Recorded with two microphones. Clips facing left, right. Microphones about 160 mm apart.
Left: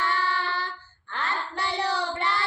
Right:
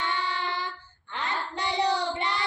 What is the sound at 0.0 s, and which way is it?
Child singing, 15° right (ahead or behind).